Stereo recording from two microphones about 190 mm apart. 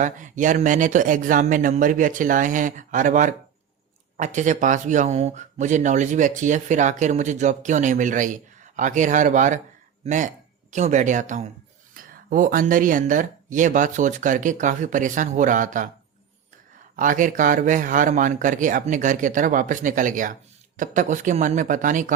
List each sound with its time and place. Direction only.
0.0 s speech: 40° right (ahead or behind)
17.0 s speech: 45° right (ahead or behind)